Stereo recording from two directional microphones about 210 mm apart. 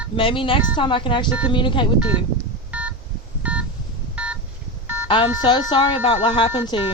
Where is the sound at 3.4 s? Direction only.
5° right (ahead or behind).